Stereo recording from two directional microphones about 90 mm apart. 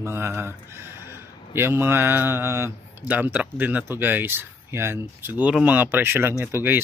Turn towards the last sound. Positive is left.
turn(degrees=-25)  # may be behind; listen again after turning